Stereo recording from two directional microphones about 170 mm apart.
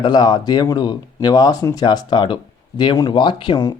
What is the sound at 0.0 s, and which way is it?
Speech, 25° left (ahead or behind).